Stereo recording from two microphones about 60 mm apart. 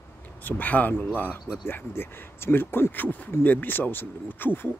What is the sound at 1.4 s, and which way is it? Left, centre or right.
Speech, centre.